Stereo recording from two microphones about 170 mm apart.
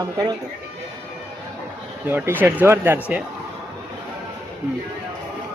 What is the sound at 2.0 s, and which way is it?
Speech, 10° right (ahead or behind).